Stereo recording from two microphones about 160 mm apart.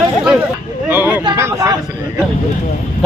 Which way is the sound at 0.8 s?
10° right (ahead or behind).